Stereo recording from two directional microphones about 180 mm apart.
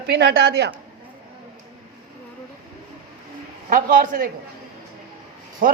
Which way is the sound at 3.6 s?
50° right (ahead or behind).